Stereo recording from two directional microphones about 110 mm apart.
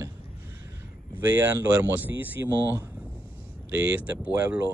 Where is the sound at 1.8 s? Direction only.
15° right (ahead or behind).